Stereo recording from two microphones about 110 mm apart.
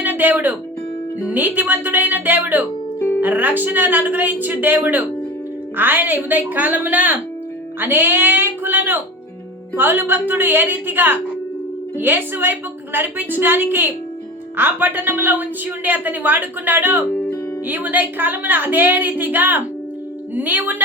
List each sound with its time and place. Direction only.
0.0 s a woman's voice: 15° right (ahead or behind)
17.1 s music: 15° left (ahead or behind)
17.7 s a woman's voice: 15° right (ahead or behind)